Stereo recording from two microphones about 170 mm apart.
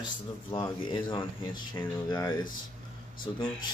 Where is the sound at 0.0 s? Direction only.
30° left (ahead or behind).